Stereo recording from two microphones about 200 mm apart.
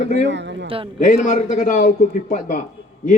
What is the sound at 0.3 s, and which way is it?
Speech, 60° right (ahead or behind).